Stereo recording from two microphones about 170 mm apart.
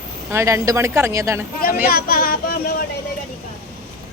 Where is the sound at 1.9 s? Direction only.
60° left (ahead or behind).